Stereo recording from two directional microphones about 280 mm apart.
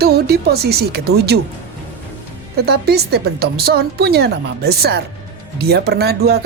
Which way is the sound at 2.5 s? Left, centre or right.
Right.